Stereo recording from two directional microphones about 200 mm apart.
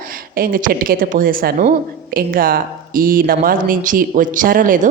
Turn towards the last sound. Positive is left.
turn(degrees=-40)  # may be behind; listen again after turning